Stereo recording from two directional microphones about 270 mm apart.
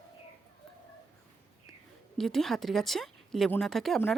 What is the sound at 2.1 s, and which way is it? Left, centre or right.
Speech, centre.